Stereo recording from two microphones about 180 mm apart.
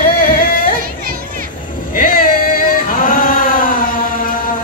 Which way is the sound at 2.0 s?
50° left (ahead or behind).